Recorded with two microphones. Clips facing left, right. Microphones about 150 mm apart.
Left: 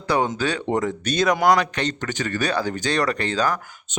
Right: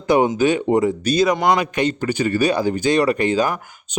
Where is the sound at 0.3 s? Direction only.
15° right (ahead or behind).